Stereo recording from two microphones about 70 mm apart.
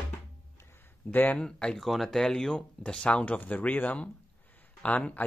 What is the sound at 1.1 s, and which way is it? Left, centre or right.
Speech, left.